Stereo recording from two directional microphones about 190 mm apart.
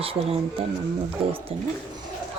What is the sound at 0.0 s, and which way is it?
Speech, 30° right (ahead or behind).